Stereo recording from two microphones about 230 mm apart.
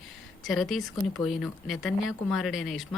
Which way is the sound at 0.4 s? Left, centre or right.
Centre.